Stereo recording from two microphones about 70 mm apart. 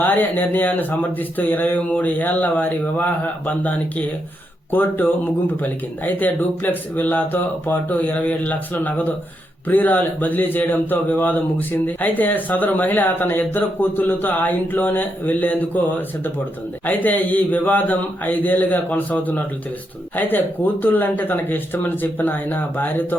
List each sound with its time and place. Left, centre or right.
0.0 s speech: left